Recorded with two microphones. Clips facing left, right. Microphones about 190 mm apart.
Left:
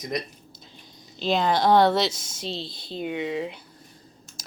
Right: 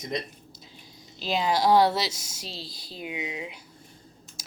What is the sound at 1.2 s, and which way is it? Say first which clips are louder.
Speech: left 3 dB; 5° right (ahead or behind).